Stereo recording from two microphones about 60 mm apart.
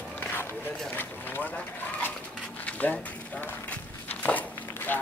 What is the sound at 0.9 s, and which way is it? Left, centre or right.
Run, left.